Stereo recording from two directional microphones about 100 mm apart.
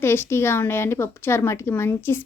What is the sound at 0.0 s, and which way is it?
A woman's voice, 25° left (ahead or behind).